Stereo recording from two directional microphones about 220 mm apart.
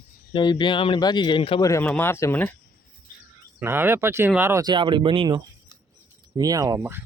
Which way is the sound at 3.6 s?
10° right (ahead or behind).